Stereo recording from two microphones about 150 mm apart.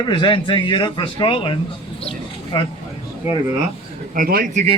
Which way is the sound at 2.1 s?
35° left (ahead or behind).